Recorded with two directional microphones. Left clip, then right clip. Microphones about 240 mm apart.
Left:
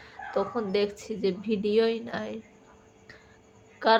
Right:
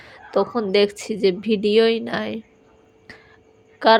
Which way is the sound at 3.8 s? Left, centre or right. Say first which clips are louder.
Right 8 dB; right.